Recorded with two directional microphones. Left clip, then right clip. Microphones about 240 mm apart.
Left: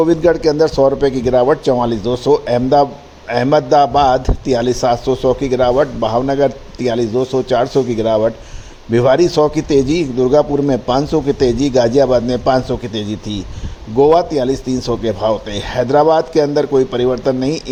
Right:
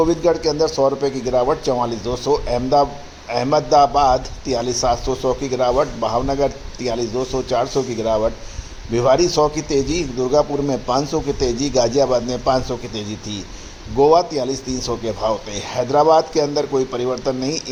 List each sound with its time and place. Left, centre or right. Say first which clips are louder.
0.0 s a man's voice: left 4 dB; left